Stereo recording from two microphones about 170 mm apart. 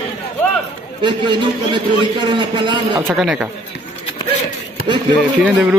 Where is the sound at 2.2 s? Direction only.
30° right (ahead or behind).